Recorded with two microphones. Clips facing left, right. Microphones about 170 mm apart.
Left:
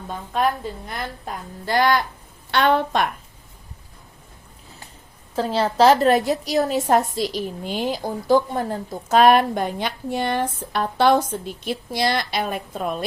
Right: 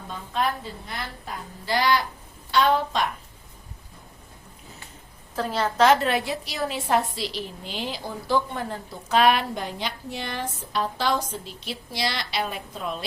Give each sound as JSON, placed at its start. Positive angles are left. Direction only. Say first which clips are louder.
{"t": 0.9, "sound": "a woman's voice", "louder": "left 4 dB", "side_deg": 50}
{"t": 2.5, "sound": "a woman's voice", "louder": "left 3 dB", "side_deg": 65}
{"t": 5.4, "sound": "a woman's voice", "louder": "left 4 dB", "side_deg": 30}